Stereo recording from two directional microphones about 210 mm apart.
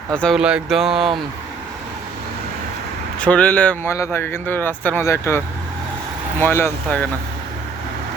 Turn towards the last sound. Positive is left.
turn(degrees=10)  # may be behind; listen again after turning